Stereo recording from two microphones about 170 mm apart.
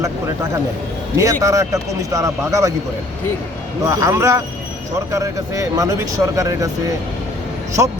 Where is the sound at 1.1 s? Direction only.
20° right (ahead or behind).